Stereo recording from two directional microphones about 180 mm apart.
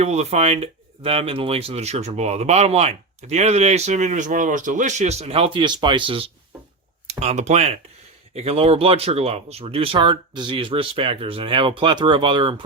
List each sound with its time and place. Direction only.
0.0 s speech: 40° right (ahead or behind)